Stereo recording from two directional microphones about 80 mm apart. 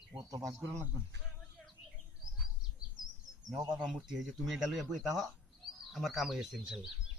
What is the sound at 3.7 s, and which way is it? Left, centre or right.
Speech, centre.